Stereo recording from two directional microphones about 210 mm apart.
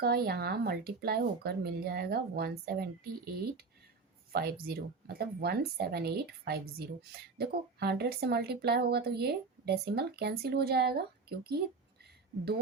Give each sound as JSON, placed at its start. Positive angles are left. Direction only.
{"t": 0.0, "sound": "speech", "side_deg": -50}